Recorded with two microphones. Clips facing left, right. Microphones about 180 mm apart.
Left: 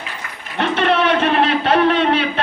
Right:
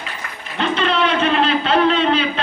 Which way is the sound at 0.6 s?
60° left (ahead or behind).